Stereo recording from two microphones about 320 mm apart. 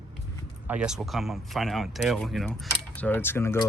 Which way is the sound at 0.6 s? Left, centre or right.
Centre.